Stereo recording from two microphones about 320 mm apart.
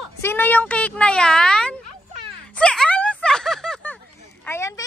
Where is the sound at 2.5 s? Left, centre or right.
Centre.